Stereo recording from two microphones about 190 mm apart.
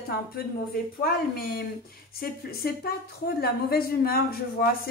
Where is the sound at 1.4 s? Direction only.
55° left (ahead or behind).